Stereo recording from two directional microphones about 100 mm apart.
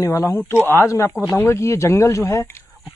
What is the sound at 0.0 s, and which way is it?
Speech, 30° left (ahead or behind).